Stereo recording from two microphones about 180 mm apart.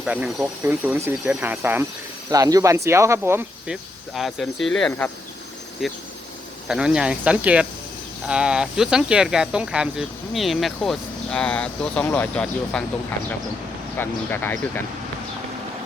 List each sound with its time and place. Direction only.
0.0 s speech: 5° right (ahead or behind)
4.1 s speech: centre (ahead or behind)
5.8 s speech: centre (ahead or behind)